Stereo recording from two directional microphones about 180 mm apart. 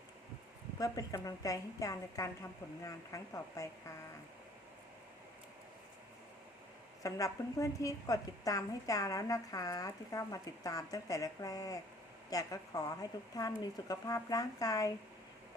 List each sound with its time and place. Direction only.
0.8 s a woman's voice: 20° left (ahead or behind)
7.0 s a woman's voice: 20° left (ahead or behind)